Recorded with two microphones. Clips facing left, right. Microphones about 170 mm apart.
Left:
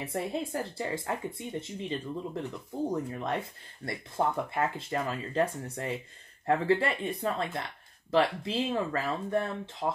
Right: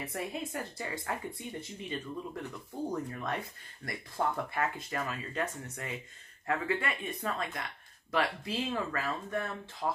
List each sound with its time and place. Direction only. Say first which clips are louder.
0.0 s speech: left 5 dB; 30° left (ahead or behind)